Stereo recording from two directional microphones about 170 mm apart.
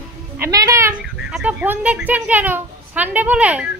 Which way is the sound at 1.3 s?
10° right (ahead or behind).